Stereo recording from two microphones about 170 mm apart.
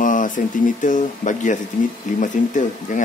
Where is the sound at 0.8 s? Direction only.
50° left (ahead or behind).